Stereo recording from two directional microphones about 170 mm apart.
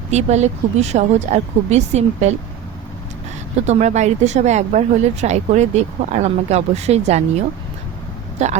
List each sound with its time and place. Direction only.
0.1 s speech: 40° right (ahead or behind)
3.7 s speech: 40° right (ahead or behind)